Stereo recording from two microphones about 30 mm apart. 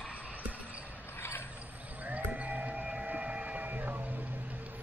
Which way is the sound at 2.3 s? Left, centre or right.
Right.